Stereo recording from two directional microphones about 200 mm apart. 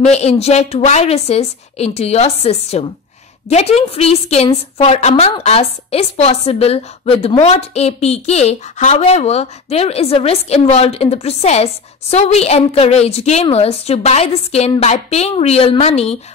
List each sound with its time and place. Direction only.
0.0 s a woman's voice: 30° left (ahead or behind)